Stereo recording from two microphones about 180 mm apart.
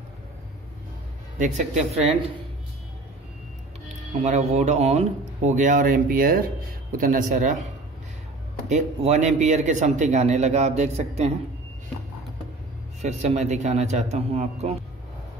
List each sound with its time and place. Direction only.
1.4 s speech: 40° right (ahead or behind)
4.2 s speech: 40° right (ahead or behind)
8.6 s speech: 40° right (ahead or behind)
13.0 s speech: 40° right (ahead or behind)